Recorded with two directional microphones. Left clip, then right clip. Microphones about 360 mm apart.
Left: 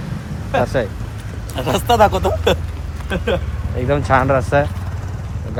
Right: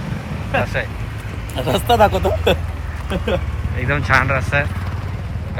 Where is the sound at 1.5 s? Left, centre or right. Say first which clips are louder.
Left 1 dB; centre.